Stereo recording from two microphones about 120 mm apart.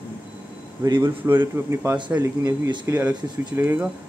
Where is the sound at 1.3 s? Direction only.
20° right (ahead or behind).